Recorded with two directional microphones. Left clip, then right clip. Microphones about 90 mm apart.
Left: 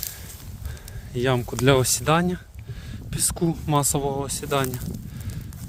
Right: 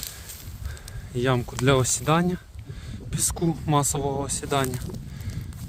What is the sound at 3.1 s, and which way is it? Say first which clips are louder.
Speech: left 1 dB; 50° left (ahead or behind).